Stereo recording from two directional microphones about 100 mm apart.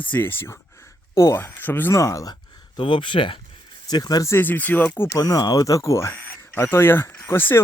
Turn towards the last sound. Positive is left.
turn(degrees=25)  # may be behind; listen again after turning